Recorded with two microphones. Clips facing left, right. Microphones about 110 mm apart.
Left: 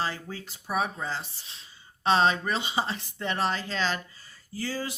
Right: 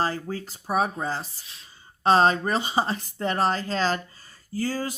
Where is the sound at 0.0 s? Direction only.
40° right (ahead or behind).